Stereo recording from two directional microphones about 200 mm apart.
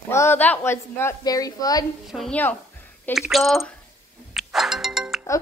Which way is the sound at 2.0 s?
Centre (ahead or behind).